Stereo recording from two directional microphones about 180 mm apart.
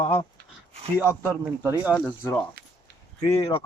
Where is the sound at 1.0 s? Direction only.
10° right (ahead or behind).